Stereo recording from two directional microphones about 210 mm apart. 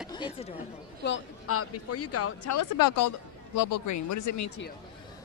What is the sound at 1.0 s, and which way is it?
Speech, 75° left (ahead or behind).